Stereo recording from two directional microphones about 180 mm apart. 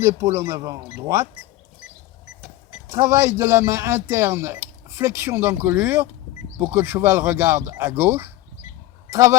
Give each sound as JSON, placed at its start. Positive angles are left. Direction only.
{"t": 0.0, "sound": "speech", "side_deg": -15}
{"t": 2.9, "sound": "speech", "side_deg": -15}